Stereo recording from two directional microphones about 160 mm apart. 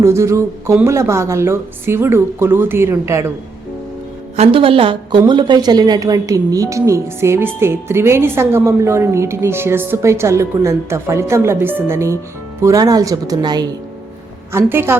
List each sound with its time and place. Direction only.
0.0 s a woman's voice: 15° right (ahead or behind)
4.4 s a woman's voice: 35° right (ahead or behind)
14.5 s a woman's voice: 15° right (ahead or behind)